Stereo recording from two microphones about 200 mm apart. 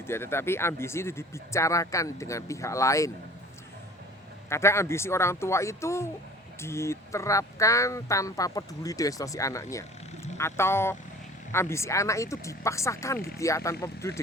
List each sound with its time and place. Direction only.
0.1 s speech: 10° left (ahead or behind)
4.4 s speech: 15° left (ahead or behind)